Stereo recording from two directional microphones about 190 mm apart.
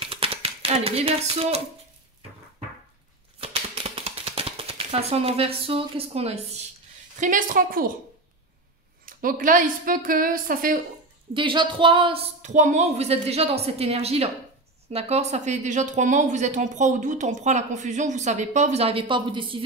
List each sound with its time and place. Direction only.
0.0 s a sound: 30° right (ahead or behind)
3.3 s typewriter: 30° right (ahead or behind)
7.2 s a woman's voice: 45° right (ahead or behind)
9.0 s a woman's voice: 45° right (ahead or behind)
11.3 s speech: 25° right (ahead or behind)